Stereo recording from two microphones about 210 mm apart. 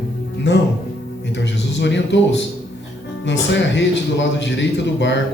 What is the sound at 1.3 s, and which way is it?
A man's voice, 55° left (ahead or behind).